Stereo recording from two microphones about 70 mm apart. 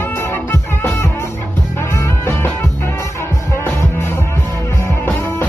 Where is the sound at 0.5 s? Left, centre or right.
Left.